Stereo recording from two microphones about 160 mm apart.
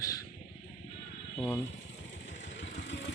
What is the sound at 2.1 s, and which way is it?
Vehicle, 90° left.